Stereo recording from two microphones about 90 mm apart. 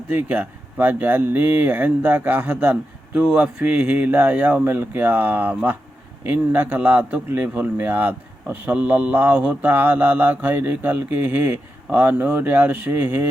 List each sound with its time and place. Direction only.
0.1 s speech: 20° right (ahead or behind)